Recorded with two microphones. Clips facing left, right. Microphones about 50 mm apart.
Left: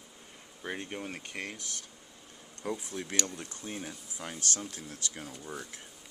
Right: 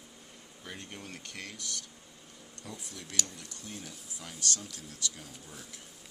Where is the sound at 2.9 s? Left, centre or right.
Left.